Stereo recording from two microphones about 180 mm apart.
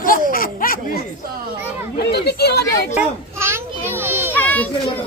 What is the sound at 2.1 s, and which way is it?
Speech, 65° left (ahead or behind).